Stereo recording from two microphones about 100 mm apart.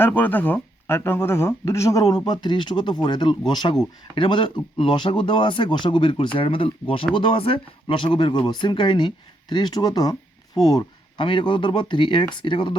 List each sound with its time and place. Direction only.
0.0 s speech: 20° left (ahead or behind); by 10.8 s 40° left (ahead or behind)
11.2 s speech: 55° left (ahead or behind)